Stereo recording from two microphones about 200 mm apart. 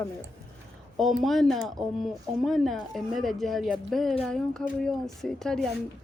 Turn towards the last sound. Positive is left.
turn(degrees=5)  # may be behind; listen again after turning